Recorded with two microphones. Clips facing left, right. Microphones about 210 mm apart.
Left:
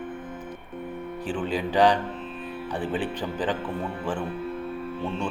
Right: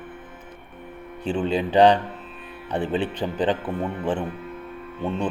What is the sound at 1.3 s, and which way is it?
Speech, 25° right (ahead or behind).